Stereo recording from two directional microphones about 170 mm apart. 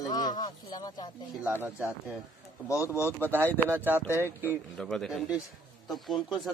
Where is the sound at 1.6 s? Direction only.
10° right (ahead or behind).